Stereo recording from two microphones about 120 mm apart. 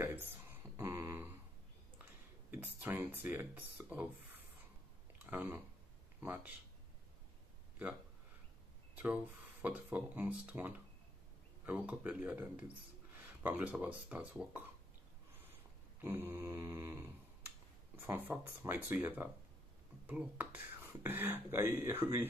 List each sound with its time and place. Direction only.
0.7 s a sound: 20° right (ahead or behind)
2.5 s speech: 15° right (ahead or behind)
5.2 s speech: 15° right (ahead or behind)
8.9 s speech: 10° right (ahead or behind)
16.0 s a sound: 20° right (ahead or behind)
17.9 s speech: 15° right (ahead or behind)